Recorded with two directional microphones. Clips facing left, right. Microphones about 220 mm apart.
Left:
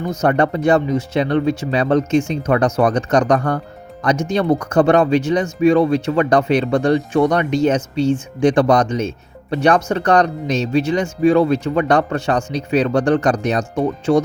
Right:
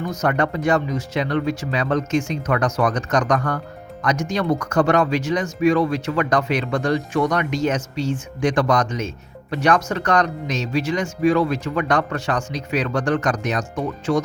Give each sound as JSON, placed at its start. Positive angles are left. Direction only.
{"t": 0.2, "sound": "speech", "side_deg": 30}